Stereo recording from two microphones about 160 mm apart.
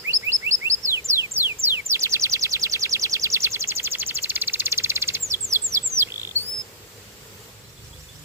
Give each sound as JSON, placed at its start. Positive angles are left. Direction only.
{"t": 0.1, "sound": "bird", "side_deg": -15}
{"t": 6.0, "sound": "chirp", "side_deg": -15}